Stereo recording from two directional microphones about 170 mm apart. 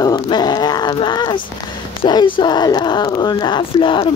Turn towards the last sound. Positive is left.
turn(degrees=30)  # may be behind; listen again after turning